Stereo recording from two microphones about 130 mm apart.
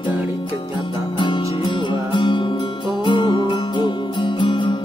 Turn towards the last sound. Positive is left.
turn(degrees=40)  # may be behind; listen again after turning